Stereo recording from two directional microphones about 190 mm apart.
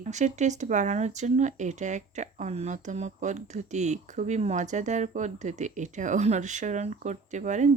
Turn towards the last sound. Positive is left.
turn(degrees=-40)  # may be behind; listen again after turning